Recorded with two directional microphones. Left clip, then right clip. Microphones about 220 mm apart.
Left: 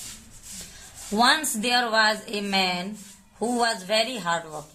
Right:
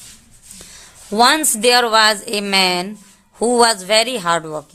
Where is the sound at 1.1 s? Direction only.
50° right (ahead or behind).